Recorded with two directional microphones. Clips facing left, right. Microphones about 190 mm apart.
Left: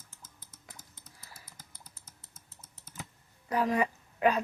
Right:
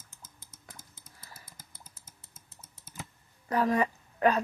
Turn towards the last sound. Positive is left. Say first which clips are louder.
# right 1 dB
turn(degrees=10)  # may be behind; listen again after turning